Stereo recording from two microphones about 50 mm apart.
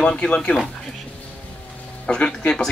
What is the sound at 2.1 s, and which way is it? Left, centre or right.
Speech, left.